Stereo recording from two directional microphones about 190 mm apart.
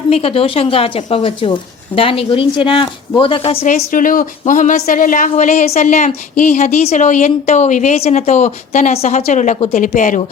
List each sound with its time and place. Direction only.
0.1 s a woman's voice: 30° left (ahead or behind)